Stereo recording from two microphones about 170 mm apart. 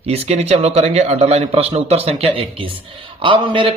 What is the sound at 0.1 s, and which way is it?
A man's voice, 40° right (ahead or behind).